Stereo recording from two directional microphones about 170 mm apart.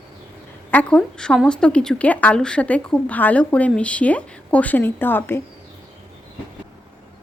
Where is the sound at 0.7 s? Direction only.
10° left (ahead or behind).